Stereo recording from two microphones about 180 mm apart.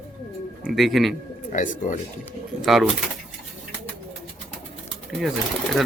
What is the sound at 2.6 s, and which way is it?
Speech, centre (ahead or behind).